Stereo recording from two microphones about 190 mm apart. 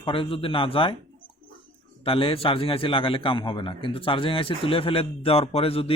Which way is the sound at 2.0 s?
30° left (ahead or behind).